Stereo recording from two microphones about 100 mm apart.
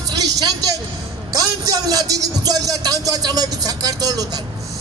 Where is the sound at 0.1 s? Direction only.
40° right (ahead or behind).